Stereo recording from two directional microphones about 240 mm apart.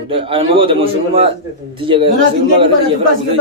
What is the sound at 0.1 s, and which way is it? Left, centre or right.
A man's voice, right.